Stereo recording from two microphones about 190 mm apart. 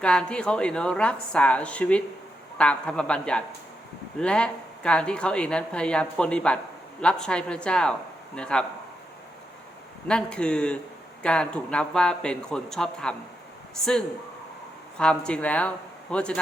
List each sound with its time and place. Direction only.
0.0 s speech: 5° left (ahead or behind)
10.1 s speech: 5° left (ahead or behind)
14.9 s speech: 5° left (ahead or behind)